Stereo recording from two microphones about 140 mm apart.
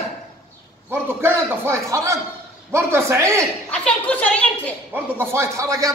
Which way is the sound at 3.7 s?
10° left (ahead or behind).